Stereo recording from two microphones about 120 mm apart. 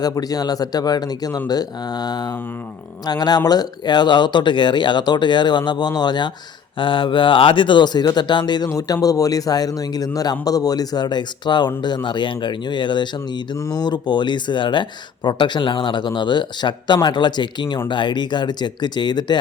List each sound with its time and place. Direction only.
0.0 s speech: 30° left (ahead or behind)